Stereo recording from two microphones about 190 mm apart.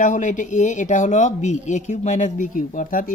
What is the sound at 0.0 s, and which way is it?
Speech, 40° left (ahead or behind).